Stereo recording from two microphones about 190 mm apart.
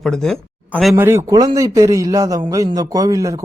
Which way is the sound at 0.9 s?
10° right (ahead or behind).